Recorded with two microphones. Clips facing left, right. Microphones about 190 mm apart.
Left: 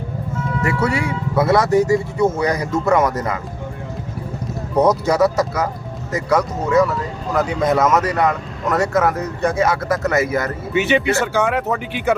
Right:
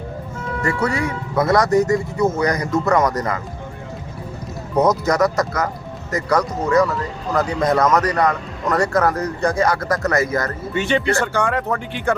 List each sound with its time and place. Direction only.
0.9 s speech: 25° left (ahead or behind)
1.4 s speech: 5° left (ahead or behind)
4.7 s speech: 10° left (ahead or behind)